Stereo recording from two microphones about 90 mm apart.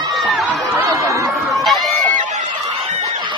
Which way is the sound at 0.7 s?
35° right (ahead or behind).